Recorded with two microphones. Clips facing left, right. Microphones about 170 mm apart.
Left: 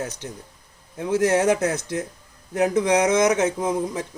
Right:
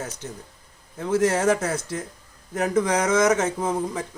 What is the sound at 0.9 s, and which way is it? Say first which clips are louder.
Speech: left 2 dB; 15° left (ahead or behind).